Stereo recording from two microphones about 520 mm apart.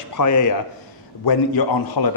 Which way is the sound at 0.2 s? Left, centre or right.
Left.